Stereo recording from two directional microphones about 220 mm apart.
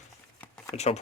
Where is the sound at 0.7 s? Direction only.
30° left (ahead or behind).